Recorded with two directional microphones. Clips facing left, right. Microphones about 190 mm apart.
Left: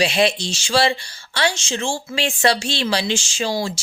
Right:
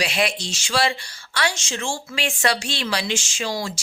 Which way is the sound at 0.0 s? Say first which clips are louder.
Left 5 dB; 25° left (ahead or behind).